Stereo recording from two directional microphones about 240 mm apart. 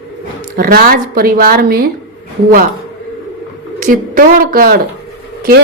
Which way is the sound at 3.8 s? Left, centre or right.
Right.